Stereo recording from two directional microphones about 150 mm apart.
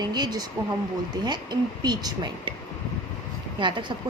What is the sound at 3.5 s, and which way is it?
Speech, 30° right (ahead or behind).